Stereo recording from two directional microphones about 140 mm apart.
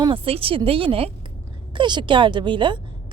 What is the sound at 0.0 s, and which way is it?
A woman's voice, 40° right (ahead or behind).